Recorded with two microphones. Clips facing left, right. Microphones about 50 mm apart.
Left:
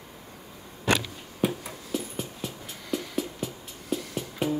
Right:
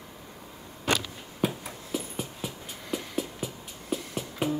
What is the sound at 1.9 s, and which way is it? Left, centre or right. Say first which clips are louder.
Dog: left 1 dB; centre.